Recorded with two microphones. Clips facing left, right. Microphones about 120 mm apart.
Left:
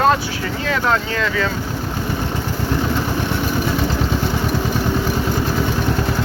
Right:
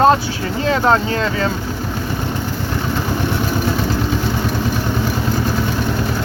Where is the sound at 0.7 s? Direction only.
30° right (ahead or behind).